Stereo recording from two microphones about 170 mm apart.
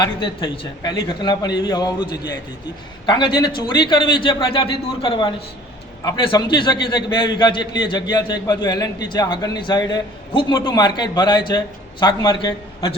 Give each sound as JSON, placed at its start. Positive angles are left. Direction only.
{"t": 0.0, "sound": "a man's voice", "side_deg": 30}